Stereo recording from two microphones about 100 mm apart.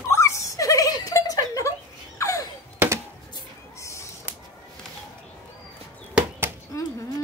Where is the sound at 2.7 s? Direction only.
20° right (ahead or behind).